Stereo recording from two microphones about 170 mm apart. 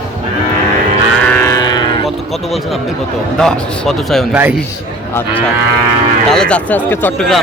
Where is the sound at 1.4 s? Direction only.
25° left (ahead or behind).